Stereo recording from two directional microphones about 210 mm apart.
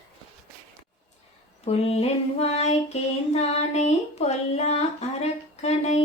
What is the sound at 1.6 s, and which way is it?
Child singing, 30° left (ahead or behind).